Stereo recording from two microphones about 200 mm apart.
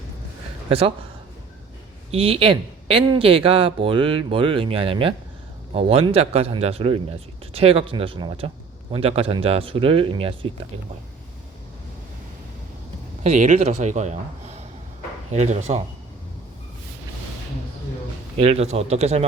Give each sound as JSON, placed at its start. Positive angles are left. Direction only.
{"t": 0.7, "sound": "speech", "side_deg": -30}
{"t": 2.0, "sound": "speech", "side_deg": -30}
{"t": 13.2, "sound": "speech", "side_deg": -35}
{"t": 18.3, "sound": "speech", "side_deg": -30}